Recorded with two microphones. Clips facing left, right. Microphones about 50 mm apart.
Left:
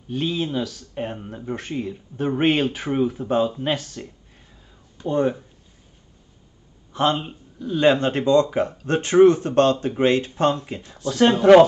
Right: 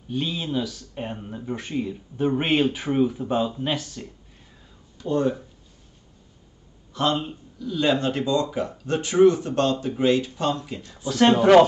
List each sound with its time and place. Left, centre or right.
0.1 s speech: centre
4.9 s speech: left
6.9 s a sound: left
7.5 s speech: left
11.1 s speech: centre